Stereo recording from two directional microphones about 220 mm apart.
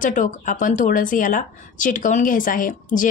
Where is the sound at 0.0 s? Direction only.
35° left (ahead or behind).